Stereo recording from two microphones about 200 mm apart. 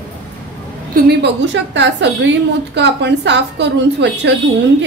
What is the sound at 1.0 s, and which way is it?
A woman's voice, 60° right (ahead or behind).